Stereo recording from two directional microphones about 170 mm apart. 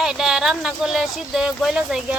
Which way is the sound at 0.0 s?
5° right (ahead or behind).